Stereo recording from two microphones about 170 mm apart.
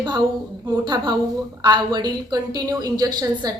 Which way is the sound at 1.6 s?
25° right (ahead or behind).